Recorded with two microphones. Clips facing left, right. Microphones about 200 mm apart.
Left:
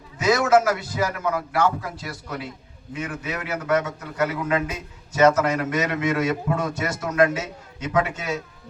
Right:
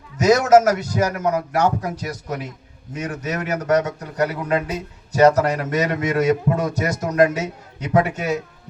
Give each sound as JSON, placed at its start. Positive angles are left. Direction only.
{"t": 0.2, "sound": "a man's voice", "side_deg": -40}